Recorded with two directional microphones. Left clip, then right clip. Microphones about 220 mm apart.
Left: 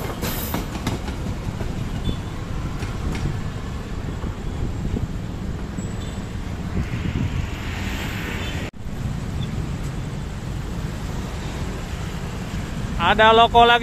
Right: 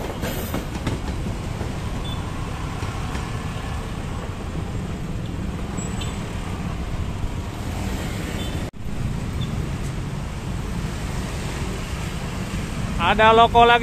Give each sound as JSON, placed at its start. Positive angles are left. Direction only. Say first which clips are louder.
{"t": 13.0, "sound": "speech", "louder": "left 1 dB", "side_deg": 10}